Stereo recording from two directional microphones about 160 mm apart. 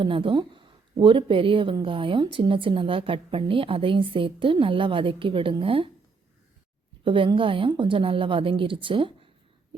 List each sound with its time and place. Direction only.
0.0 s speech: 35° right (ahead or behind)
7.0 s speech: 30° right (ahead or behind)